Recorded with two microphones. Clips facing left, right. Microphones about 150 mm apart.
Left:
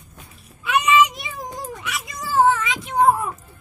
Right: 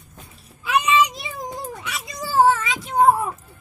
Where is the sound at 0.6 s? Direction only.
30° right (ahead or behind).